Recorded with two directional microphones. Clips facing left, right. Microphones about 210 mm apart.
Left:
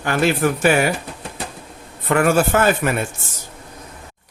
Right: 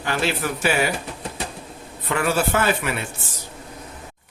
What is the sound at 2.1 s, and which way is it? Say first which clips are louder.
Speech: left 5 dB; 50° left (ahead or behind).